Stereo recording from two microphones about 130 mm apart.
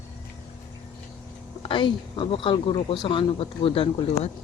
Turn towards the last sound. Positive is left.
turn(degrees=45)  # may be behind; listen again after turning